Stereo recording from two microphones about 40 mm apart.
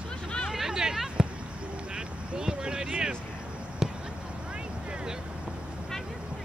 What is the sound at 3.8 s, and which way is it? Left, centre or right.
Basketball bounce, centre.